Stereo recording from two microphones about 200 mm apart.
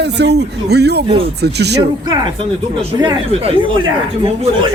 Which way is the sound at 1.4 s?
55° right (ahead or behind).